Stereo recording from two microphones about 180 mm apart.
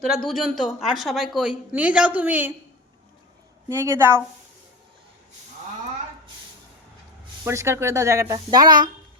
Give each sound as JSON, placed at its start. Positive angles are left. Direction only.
{"t": 0.1, "sound": "a woman's voice", "side_deg": 0}
{"t": 3.7, "sound": "speech", "side_deg": -15}
{"t": 7.4, "sound": "speech", "side_deg": -15}